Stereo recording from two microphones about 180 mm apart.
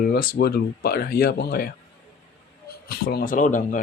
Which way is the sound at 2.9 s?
60° left (ahead or behind).